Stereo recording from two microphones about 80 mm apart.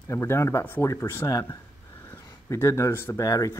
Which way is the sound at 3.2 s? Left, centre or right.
Left.